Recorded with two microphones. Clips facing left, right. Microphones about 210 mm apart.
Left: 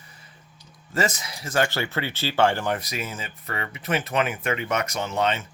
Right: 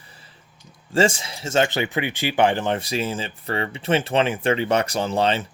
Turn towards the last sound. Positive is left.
turn(degrees=-30)  # may be behind; listen again after turning